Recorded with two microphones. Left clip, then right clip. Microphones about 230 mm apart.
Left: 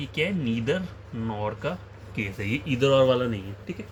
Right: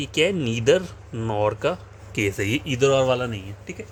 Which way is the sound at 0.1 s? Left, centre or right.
Right.